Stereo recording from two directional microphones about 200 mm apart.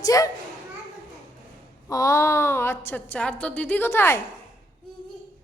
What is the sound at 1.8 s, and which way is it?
A woman's voice, 15° left (ahead or behind).